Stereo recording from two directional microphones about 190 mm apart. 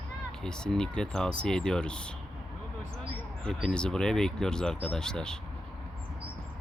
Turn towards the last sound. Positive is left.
turn(degrees=5)  # may be behind; listen again after turning